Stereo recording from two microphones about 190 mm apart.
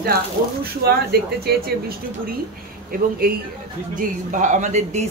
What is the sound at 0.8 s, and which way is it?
Speech, 55° right (ahead or behind).